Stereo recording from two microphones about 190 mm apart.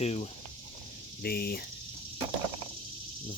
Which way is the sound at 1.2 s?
55° left (ahead or behind).